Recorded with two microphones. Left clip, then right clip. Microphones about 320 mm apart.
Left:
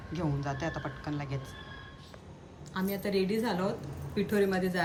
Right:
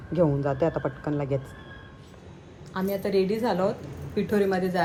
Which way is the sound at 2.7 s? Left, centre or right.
Centre.